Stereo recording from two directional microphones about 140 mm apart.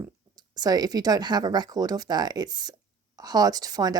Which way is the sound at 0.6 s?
30° right (ahead or behind).